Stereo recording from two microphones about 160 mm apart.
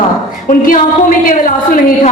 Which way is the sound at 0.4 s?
55° left (ahead or behind).